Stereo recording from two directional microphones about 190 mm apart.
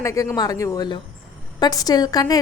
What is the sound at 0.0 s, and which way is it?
A woman's voice, 15° left (ahead or behind).